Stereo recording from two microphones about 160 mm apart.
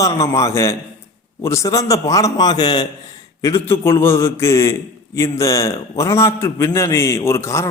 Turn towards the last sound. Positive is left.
turn(degrees=20)  # may be behind; listen again after turning